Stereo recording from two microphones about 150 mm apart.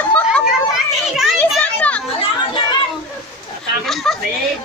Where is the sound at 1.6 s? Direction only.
10° left (ahead or behind).